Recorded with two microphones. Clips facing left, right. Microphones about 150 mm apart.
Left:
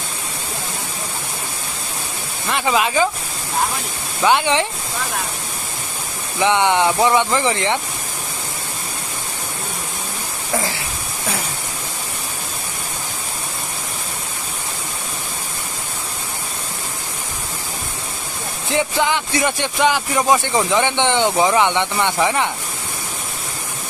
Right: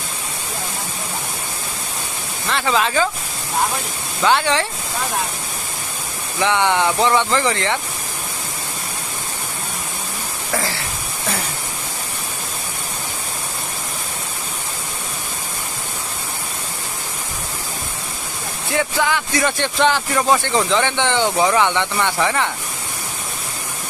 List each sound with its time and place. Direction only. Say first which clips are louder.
2.5 s speech: left 1 dB; 15° left (ahead or behind)
4.2 s speech: left 1 dB; 15° left (ahead or behind)
6.4 s speech: left 2 dB; 20° left (ahead or behind)
18.7 s speech: left 1 dB; 20° left (ahead or behind)